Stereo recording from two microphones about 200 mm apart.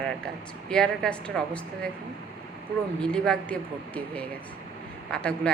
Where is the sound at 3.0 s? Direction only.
5° left (ahead or behind).